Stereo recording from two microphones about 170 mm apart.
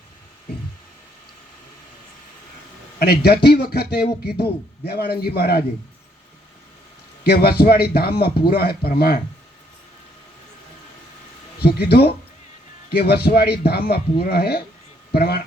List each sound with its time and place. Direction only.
3.0 s speech: 70° left (ahead or behind)
7.3 s speech: 70° left (ahead or behind)
11.6 s speech: 70° left (ahead or behind)